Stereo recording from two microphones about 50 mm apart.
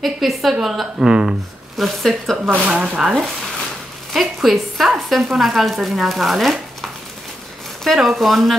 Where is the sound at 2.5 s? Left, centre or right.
Right.